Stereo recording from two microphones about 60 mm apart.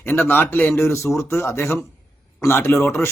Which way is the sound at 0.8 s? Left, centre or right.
Left.